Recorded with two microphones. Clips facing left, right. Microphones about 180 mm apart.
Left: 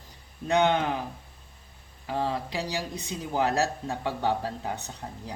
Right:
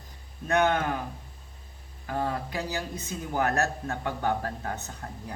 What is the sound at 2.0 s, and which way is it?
Speech, 25° left (ahead or behind).